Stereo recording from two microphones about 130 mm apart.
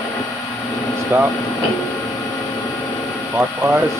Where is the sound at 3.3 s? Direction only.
20° right (ahead or behind).